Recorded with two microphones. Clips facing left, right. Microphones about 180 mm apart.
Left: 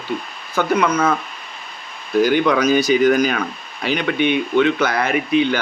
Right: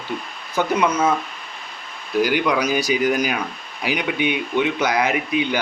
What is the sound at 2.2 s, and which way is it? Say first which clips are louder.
Speech: left 4 dB; 10° right (ahead or behind).